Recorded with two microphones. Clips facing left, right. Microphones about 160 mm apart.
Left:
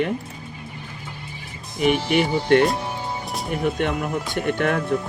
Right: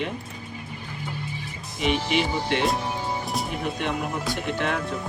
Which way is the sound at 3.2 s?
Centre (ahead or behind).